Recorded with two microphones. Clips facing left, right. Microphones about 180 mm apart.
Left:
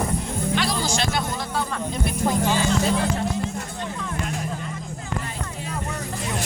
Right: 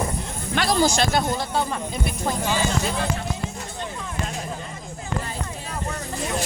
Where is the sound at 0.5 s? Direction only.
45° right (ahead or behind).